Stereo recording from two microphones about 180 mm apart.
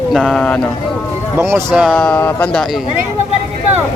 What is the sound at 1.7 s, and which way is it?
Speech, centre (ahead or behind).